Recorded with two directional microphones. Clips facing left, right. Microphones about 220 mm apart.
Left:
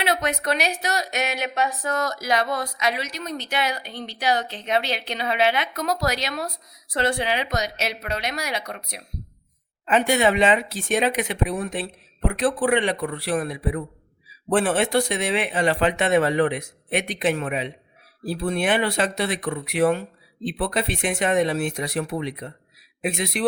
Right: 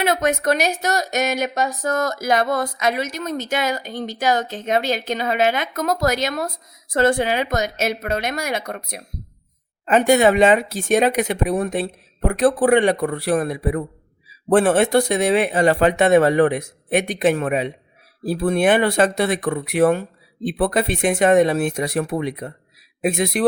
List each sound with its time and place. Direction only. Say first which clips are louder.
0.0 s a woman's voice: right 5 dB; 45° right (ahead or behind)